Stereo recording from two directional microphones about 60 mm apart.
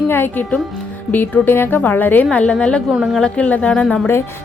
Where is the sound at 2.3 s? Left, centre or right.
Centre.